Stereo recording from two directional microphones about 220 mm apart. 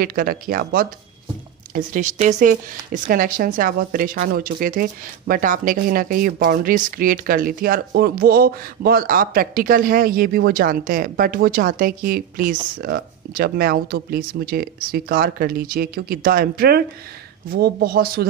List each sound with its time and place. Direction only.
0.0 s speech: 40° right (ahead or behind)